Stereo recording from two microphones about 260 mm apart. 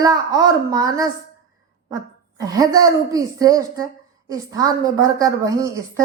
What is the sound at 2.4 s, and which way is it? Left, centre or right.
A woman's voice, centre.